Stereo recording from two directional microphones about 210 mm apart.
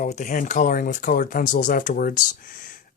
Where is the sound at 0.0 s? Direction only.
35° left (ahead or behind).